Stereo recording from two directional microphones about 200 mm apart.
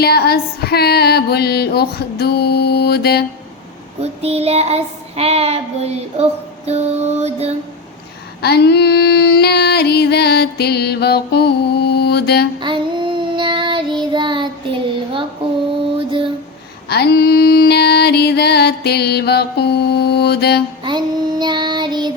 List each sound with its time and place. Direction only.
0.0 s female singing: 50° left (ahead or behind)
4.0 s child singing: 30° right (ahead or behind)
8.4 s female singing: 55° left (ahead or behind)
12.6 s child singing: 25° right (ahead or behind)
16.0 s a sound: 25° right (ahead or behind)
16.9 s music: 55° left (ahead or behind)
20.8 s child singing: 20° right (ahead or behind)